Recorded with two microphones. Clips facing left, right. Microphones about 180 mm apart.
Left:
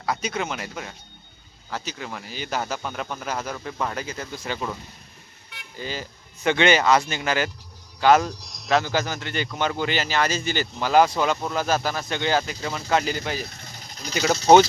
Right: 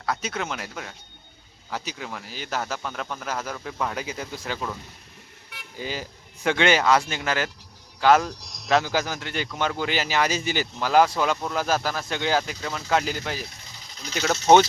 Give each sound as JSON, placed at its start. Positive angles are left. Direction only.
{"t": 0.0, "sound": "speech", "side_deg": 0}
{"t": 1.7, "sound": "speech", "side_deg": -10}
{"t": 2.0, "sound": "speech", "side_deg": 0}
{"t": 4.0, "sound": "speech", "side_deg": -10}
{"t": 5.5, "sound": "vehicle", "side_deg": -10}
{"t": 6.5, "sound": "speech", "side_deg": 0}
{"t": 13.7, "sound": "vehicle", "side_deg": 45}
{"t": 14.3, "sound": "speech", "side_deg": 35}